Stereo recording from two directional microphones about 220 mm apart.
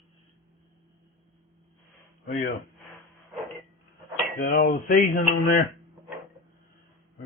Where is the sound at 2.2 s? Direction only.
45° left (ahead or behind).